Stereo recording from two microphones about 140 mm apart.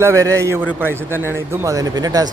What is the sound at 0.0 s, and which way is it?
A man's voice, 20° right (ahead or behind).